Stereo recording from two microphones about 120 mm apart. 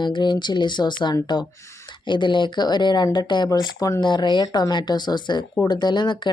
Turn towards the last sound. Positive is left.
turn(degrees=40)  # may be behind; listen again after turning